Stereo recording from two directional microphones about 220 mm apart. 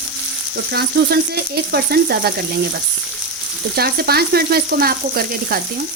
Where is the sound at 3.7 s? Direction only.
45° right (ahead or behind).